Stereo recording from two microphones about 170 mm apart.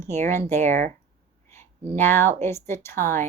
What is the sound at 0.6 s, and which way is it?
Speech, 45° right (ahead or behind).